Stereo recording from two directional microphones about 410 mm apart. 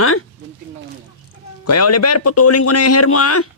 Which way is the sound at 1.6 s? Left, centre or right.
Left.